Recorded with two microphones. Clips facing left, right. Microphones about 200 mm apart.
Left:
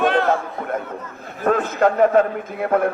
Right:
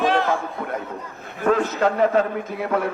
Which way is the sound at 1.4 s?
50° left (ahead or behind).